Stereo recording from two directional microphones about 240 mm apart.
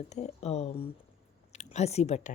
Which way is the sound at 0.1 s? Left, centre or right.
Left.